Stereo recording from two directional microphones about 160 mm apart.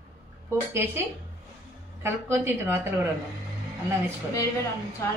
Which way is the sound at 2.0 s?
15° right (ahead or behind).